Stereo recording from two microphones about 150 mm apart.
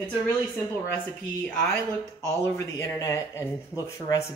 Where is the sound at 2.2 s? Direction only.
20° left (ahead or behind).